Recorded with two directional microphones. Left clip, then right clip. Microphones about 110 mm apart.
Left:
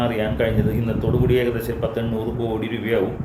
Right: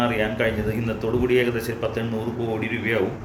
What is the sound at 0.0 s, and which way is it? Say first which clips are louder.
A man's voice: left 1 dB; 30° left (ahead or behind).